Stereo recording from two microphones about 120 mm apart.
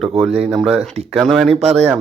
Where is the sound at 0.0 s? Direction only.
Centre (ahead or behind).